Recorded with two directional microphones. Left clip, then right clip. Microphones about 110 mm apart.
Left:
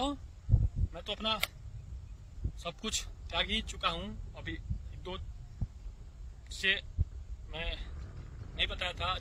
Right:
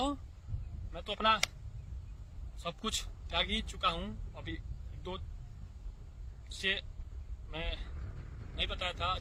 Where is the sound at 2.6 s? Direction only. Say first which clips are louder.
Even; 25° left (ahead or behind).